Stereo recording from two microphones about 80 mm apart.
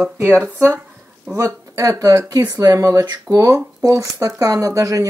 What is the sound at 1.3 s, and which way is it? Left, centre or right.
Speech, right.